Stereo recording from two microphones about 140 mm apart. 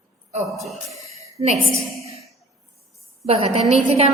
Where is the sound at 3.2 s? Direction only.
45° right (ahead or behind).